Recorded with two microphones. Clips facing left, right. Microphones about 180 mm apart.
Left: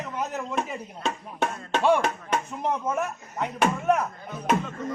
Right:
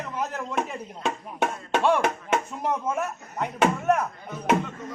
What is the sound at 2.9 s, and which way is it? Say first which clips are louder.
Speech: even; 5° left (ahead or behind).